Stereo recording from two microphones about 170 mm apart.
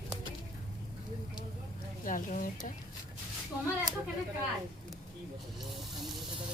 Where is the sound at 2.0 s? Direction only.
50° left (ahead or behind).